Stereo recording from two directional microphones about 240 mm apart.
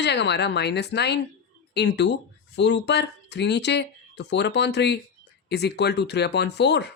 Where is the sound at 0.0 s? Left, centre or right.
Left.